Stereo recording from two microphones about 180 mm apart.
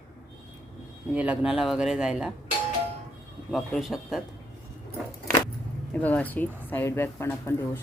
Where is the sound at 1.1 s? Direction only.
5° right (ahead or behind).